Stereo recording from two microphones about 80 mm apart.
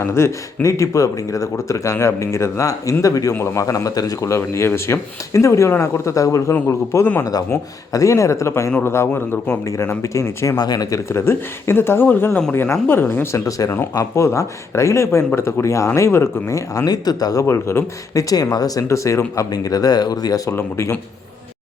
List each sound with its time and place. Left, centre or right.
0.0 s speech: left
3.3 s speech: left
7.3 s speech: left
10.6 s speech: left
11.1 s speech: left
13.3 s speech: left
17.4 s speech: left
19.5 s speech: left
20.5 s speech: left